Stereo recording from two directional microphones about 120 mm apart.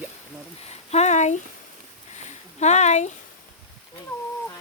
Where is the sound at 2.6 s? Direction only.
70° left (ahead or behind).